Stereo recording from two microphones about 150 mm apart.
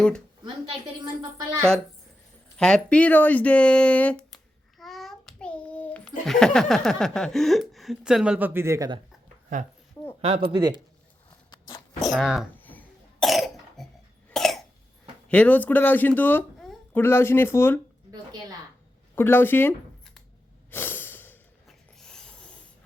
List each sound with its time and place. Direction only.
2.6 s a child's voice: 5° left (ahead or behind); by 8.9 s 20° right (ahead or behind)
10.2 s speech: 40° right (ahead or behind)
10.5 s speech: 30° right (ahead or behind)
12.0 s speech: centre (ahead or behind)
12.5 s cough: 10° left (ahead or behind)
15.3 s speech: 10° left (ahead or behind)
18.1 s a sound: 30° right (ahead or behind)
19.1 s speech: 15° left (ahead or behind)
20.7 s breathing: 15° left (ahead or behind)
21.7 s rub: 5° left (ahead or behind)